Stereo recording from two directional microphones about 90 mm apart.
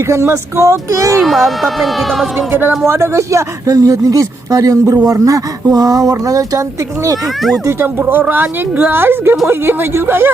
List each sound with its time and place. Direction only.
0.1 s speech: 30° right (ahead or behind)
1.2 s speech: centre (ahead or behind)
2.5 s speech: 25° right (ahead or behind); by 6.6 s 40° right (ahead or behind)
7.6 s speech: 30° right (ahead or behind)